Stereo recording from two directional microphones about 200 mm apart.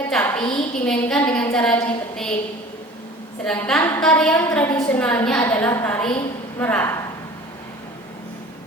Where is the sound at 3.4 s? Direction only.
5° left (ahead or behind).